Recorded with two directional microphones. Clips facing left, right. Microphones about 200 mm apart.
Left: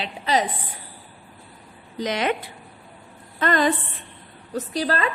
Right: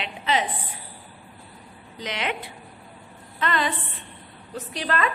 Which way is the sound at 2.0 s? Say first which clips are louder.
Left 6 dB; 45° left (ahead or behind).